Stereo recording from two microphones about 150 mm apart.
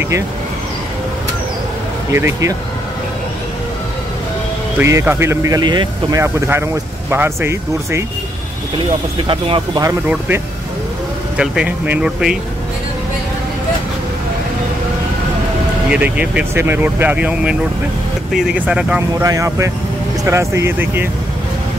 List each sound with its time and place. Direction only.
2.1 s speech: 15° right (ahead or behind)
4.7 s speech: 15° right (ahead or behind)
6.2 s speech: 15° right (ahead or behind)
9.3 s speech: 35° right (ahead or behind)
10.0 s speech: 10° right (ahead or behind)
15.9 s speech: 10° right (ahead or behind)
19.1 s speech: 20° right (ahead or behind)